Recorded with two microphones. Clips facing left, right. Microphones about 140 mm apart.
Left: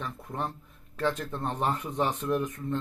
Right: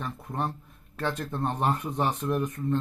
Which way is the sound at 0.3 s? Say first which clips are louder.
Right 3 dB; 15° right (ahead or behind).